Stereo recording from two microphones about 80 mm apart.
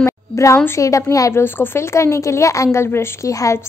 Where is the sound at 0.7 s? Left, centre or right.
Left.